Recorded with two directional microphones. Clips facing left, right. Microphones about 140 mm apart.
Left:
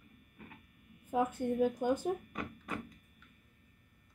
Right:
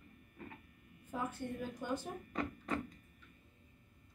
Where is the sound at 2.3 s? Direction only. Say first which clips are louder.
Right 3 dB; 15° left (ahead or behind).